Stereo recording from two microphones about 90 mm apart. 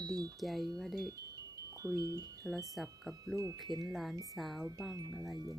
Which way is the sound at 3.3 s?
35° right (ahead or behind).